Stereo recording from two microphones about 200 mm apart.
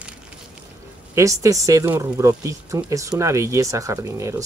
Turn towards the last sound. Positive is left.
turn(degrees=-15)  # may be behind; listen again after turning